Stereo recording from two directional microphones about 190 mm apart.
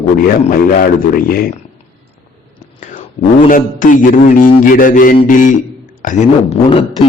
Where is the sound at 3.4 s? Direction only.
45° left (ahead or behind).